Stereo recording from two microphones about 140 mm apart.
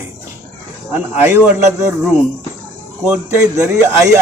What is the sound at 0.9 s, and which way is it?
Speech, 15° right (ahead or behind).